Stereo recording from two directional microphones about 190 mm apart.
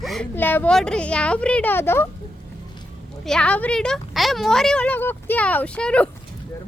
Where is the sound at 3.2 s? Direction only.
5° left (ahead or behind).